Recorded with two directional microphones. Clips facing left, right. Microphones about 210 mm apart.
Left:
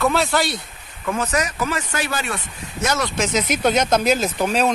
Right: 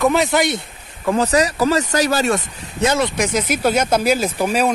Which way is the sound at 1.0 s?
35° right (ahead or behind).